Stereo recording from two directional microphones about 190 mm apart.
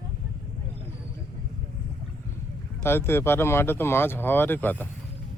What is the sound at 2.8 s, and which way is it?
Speech, 10° left (ahead or behind).